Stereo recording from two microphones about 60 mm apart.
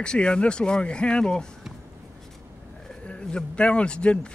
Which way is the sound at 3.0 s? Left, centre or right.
Centre.